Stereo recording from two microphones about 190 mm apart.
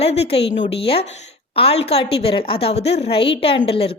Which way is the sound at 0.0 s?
35° left (ahead or behind).